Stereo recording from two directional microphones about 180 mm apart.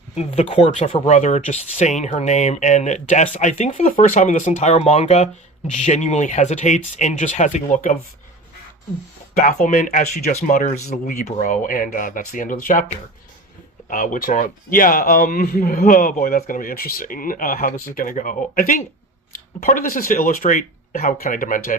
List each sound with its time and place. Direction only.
0.2 s speech: 35° left (ahead or behind)
9.3 s speech: 45° left (ahead or behind)